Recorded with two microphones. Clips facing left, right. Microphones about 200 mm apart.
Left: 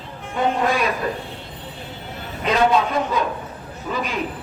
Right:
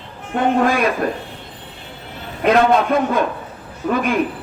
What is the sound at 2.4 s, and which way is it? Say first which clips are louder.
A man's voice: right 4 dB; 55° right (ahead or behind).